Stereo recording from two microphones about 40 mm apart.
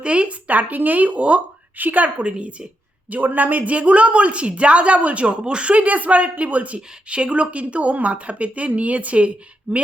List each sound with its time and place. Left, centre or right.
0.0 s speech: right
1.8 s a woman's voice: right
2.2 s speech: right
3.1 s speech: right